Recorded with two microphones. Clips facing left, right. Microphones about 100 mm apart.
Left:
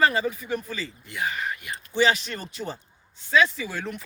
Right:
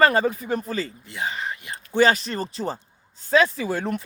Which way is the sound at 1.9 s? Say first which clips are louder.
Right 4 dB; 45° right (ahead or behind).